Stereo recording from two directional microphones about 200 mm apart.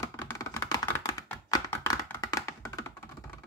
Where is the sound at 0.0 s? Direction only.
15° left (ahead or behind).